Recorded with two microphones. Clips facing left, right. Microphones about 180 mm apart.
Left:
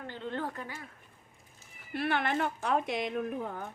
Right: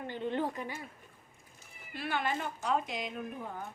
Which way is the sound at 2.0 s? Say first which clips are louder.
Left 4 dB; 60° left (ahead or behind).